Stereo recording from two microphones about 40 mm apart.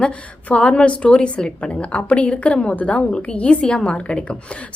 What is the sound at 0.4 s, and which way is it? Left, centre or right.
A woman's voice, left.